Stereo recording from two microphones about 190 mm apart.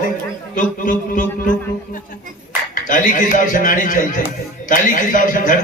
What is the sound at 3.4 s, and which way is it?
A man's voice, 45° left (ahead or behind).